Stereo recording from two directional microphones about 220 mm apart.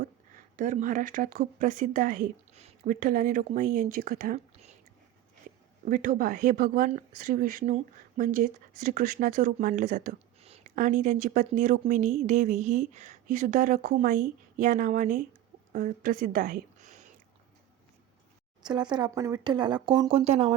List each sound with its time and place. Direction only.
0.0 s speech: 35° right (ahead or behind)
5.8 s a woman's voice: 40° right (ahead or behind)
18.6 s speech: 20° right (ahead or behind)